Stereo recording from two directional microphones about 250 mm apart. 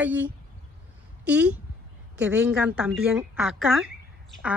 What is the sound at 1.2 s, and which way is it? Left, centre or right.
Speech, centre.